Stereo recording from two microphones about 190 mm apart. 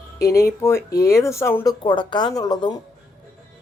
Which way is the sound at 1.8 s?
25° left (ahead or behind).